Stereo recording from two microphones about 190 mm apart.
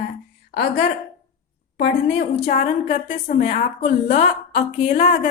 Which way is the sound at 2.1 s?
45° left (ahead or behind).